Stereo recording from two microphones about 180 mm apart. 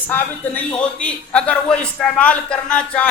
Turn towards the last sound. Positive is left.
turn(degrees=5)  # may be behind; listen again after turning